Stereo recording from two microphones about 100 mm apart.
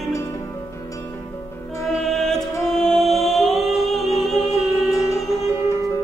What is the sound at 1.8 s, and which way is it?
Music, centre (ahead or behind).